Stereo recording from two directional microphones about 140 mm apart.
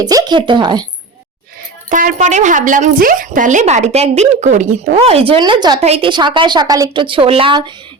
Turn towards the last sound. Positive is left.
turn(degrees=-40)  # may be behind; listen again after turning